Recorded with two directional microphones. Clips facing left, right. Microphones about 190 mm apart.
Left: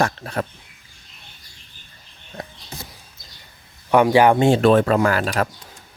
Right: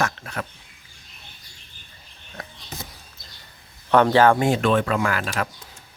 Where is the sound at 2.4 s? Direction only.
25° left (ahead or behind).